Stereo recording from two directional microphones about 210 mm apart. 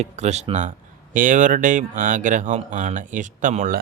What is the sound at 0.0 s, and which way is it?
Speech, 30° right (ahead or behind).